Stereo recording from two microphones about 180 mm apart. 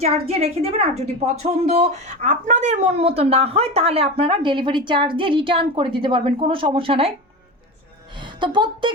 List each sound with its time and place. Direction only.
0.0 s a woman's voice: 35° right (ahead or behind)
8.2 s a woman's voice: 25° right (ahead or behind)